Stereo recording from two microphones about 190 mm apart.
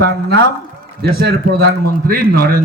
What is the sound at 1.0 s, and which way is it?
A man's voice, 60° right (ahead or behind).